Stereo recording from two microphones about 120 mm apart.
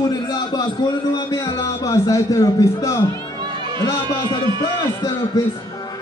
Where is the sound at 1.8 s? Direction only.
25° left (ahead or behind).